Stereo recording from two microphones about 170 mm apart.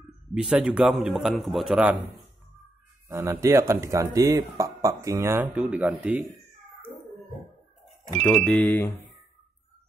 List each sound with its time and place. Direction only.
0.4 s a man's voice: 5° right (ahead or behind)
3.1 s speech: 15° right (ahead or behind)
7.8 s speech: 5° left (ahead or behind)